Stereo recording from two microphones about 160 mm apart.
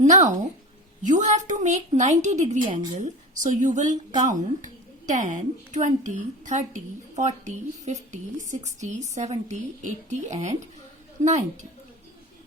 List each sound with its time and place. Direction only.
0.0 s a woman's voice: 50° right (ahead or behind)